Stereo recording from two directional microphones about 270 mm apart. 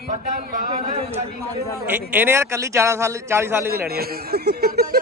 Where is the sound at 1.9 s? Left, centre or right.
Centre.